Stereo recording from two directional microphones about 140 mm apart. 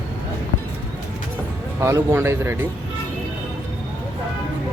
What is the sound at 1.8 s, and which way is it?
Speech, 20° right (ahead or behind).